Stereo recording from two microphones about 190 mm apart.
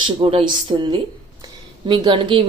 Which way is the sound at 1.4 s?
25° right (ahead or behind).